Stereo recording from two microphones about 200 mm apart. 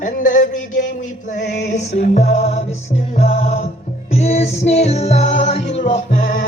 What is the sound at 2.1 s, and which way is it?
Music, 35° left (ahead or behind).